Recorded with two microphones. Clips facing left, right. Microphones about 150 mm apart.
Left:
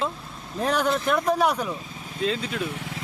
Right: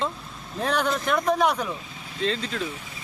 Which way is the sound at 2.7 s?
90° left.